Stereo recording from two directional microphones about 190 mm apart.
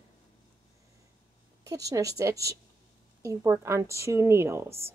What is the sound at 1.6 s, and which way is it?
Speech, 15° right (ahead or behind).